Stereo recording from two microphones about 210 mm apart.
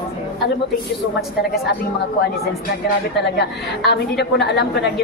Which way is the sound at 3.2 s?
55° left (ahead or behind).